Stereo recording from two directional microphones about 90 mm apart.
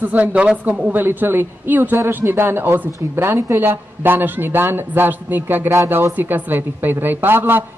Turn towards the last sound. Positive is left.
turn(degrees=-25)  # may be behind; listen again after turning